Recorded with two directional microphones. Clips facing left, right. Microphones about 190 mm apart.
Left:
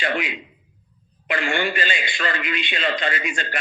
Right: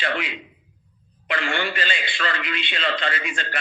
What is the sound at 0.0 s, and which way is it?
A man's voice, 10° left (ahead or behind).